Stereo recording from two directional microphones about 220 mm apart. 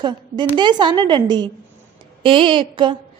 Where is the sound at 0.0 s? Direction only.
20° right (ahead or behind).